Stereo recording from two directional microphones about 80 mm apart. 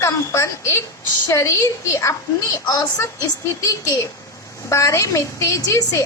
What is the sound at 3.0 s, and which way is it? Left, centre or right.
A woman's voice, left.